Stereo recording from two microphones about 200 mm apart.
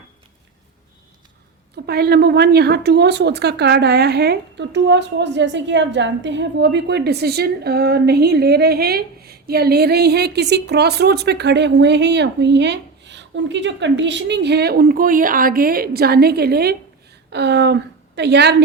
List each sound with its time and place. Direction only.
1.7 s a woman's voice: 50° right (ahead or behind)